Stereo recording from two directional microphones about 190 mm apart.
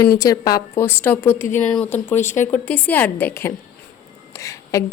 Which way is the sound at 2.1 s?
40° left (ahead or behind).